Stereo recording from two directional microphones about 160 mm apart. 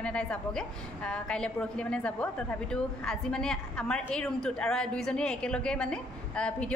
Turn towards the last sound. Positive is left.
turn(degrees=5)  # may be behind; listen again after turning